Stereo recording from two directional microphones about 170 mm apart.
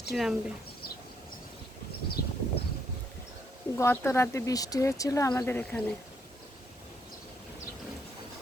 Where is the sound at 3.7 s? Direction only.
15° left (ahead or behind).